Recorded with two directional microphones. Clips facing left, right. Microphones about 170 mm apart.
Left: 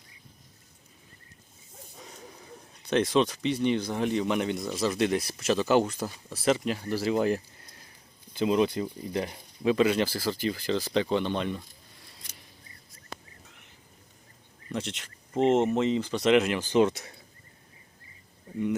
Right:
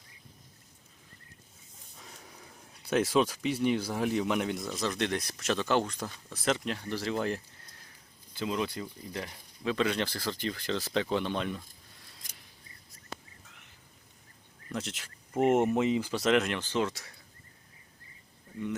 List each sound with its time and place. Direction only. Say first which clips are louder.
2.8 s speech: left 2 dB; 5° right (ahead or behind); by 9.7 s 20° left (ahead or behind)
9.7 s speech: left 4 dB; 5° left (ahead or behind)
14.7 s a sound: left 3 dB; centre (ahead or behind)
15.4 s speech: left 2 dB; 10° right (ahead or behind); by 17.2 s 20° left (ahead or behind)